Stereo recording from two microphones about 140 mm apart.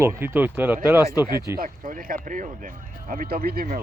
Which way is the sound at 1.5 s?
85° right.